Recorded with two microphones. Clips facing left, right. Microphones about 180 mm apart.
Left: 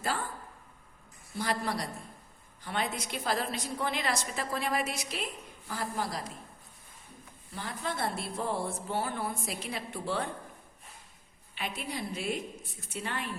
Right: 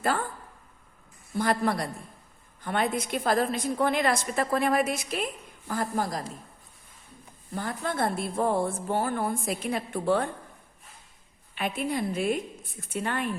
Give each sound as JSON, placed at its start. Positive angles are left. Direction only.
{"t": 0.0, "sound": "speech", "side_deg": -55}
{"t": 1.4, "sound": "a woman's voice", "side_deg": -55}
{"t": 7.5, "sound": "a woman's voice", "side_deg": -50}
{"t": 11.5, "sound": "a woman's voice", "side_deg": -50}